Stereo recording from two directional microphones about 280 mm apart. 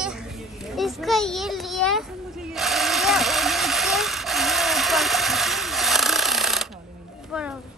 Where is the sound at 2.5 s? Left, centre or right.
Centre.